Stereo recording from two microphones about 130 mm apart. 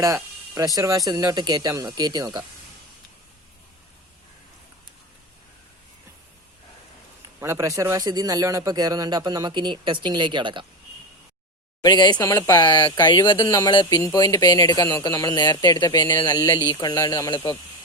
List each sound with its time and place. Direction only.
0.0 s speech: 25° right (ahead or behind)
7.3 s a man's voice: 20° right (ahead or behind); by 10.7 s 40° right (ahead or behind)
11.8 s speech: 35° left (ahead or behind)
12.2 s speech: 25° left (ahead or behind)
15.4 s speech: 35° left (ahead or behind)